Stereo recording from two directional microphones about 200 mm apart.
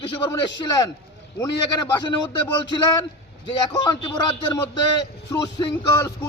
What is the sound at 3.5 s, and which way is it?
A man's voice, 20° left (ahead or behind).